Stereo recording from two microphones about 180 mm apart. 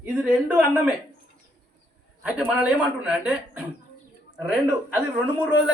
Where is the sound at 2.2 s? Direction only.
5° right (ahead or behind).